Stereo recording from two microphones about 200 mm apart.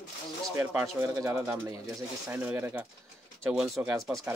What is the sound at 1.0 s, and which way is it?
Speech, 15° right (ahead or behind).